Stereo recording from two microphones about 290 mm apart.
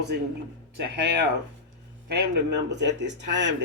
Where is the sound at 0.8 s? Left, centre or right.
Right.